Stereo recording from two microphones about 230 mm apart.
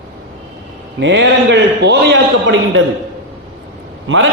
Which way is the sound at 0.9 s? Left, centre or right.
Right.